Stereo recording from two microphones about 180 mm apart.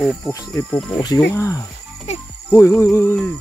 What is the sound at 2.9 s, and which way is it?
Speech, 10° left (ahead or behind).